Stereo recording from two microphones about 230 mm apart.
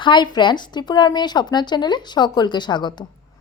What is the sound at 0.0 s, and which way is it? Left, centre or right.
A woman's voice, centre.